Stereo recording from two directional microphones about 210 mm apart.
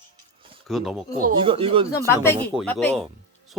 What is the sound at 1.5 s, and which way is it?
Speech, 25° right (ahead or behind).